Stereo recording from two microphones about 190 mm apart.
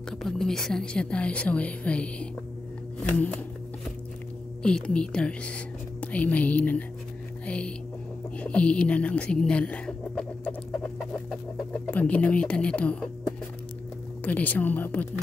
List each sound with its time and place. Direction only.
0.2 s speech: centre (ahead or behind)
4.6 s speech: 5° left (ahead or behind)
11.9 s speech: 10° left (ahead or behind)
14.2 s speech: 10° left (ahead or behind)